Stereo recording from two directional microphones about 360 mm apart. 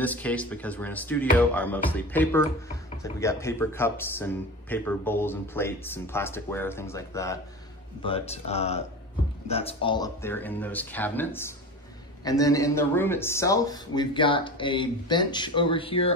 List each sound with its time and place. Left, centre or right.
0.0 s speech: centre